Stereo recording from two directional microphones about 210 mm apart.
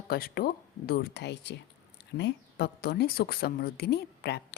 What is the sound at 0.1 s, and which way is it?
A woman's voice, 45° left (ahead or behind).